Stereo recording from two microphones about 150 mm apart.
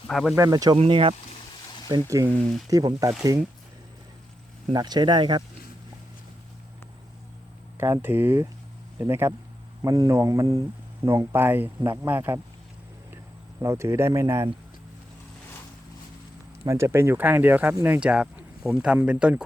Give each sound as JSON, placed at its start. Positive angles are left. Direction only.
{"t": 0.1, "sound": "speech", "side_deg": 0}
{"t": 0.3, "sound": "speech", "side_deg": -25}
{"t": 0.8, "sound": "speech", "side_deg": -35}
{"t": 1.9, "sound": "speech", "side_deg": -25}
{"t": 4.7, "sound": "speech", "side_deg": -25}
{"t": 7.8, "sound": "speech", "side_deg": -15}
{"t": 13.6, "sound": "speech", "side_deg": -20}
{"t": 16.6, "sound": "speech", "side_deg": -20}